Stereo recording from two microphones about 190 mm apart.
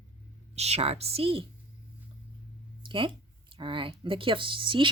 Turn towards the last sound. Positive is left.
turn(degrees=-25)  # may be behind; listen again after turning